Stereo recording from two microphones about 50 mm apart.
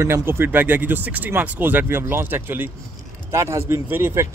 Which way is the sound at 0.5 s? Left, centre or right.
Right.